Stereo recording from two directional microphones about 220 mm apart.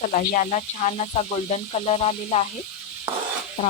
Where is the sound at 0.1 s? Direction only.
35° left (ahead or behind).